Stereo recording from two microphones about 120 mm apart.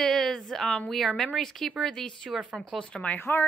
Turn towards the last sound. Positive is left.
turn(degrees=15)  # may be behind; listen again after turning